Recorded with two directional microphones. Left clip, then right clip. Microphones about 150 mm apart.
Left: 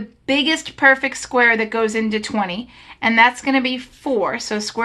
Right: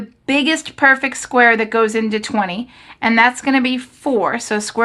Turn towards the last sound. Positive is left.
turn(degrees=-40)  # may be behind; listen again after turning